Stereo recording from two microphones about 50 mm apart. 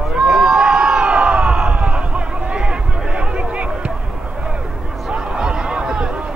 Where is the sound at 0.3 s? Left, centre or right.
Centre.